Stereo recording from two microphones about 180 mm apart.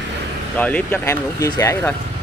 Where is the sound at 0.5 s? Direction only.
10° left (ahead or behind).